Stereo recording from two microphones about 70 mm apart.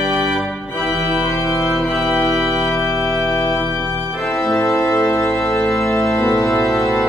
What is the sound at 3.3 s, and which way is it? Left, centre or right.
Organ, left.